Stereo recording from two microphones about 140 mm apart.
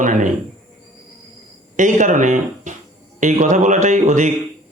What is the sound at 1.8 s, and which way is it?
Speech, 65° right (ahead or behind).